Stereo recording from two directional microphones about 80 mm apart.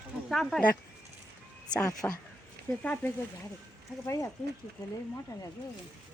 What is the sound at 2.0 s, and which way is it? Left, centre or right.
Speech, left.